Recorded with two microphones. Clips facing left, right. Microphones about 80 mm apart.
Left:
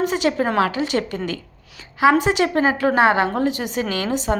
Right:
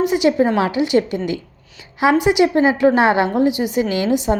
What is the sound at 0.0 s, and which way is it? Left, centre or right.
Speech, centre.